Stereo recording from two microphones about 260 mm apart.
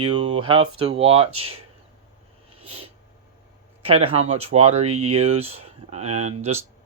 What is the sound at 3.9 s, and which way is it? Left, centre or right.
Speech, right.